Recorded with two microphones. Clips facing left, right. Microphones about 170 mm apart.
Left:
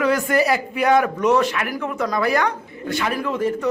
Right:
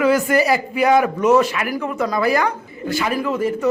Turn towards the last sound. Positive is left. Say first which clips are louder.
# right 2 dB
turn(degrees=-5)  # may be behind; listen again after turning